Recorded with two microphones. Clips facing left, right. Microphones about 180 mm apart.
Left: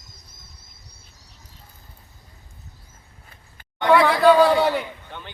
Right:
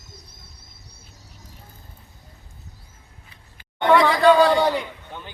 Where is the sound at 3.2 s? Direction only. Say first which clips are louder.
Left 1 dB; 50° left (ahead or behind).